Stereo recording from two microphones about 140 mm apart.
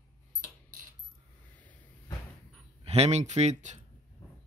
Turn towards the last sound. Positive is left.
turn(degrees=-55)  # may be behind; listen again after turning